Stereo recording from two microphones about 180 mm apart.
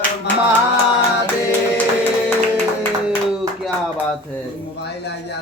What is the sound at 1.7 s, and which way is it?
Music, 10° left (ahead or behind).